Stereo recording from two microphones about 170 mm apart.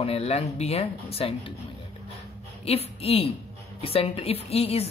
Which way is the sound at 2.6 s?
35° left (ahead or behind).